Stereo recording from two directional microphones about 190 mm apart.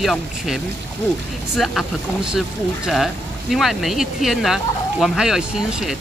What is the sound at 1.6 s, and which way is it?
Speech, centre (ahead or behind).